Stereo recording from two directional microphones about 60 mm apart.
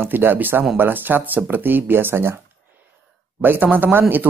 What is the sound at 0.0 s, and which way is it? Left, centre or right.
Speech, right.